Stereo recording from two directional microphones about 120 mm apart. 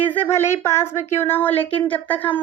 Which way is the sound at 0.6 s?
20° left (ahead or behind).